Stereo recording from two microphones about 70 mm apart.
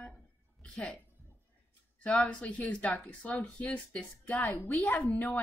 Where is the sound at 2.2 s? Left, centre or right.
Centre.